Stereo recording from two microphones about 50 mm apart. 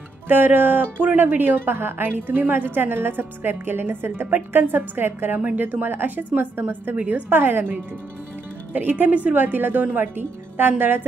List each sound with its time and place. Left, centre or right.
0.3 s a woman's voice: right
7.2 s a woman's voice: right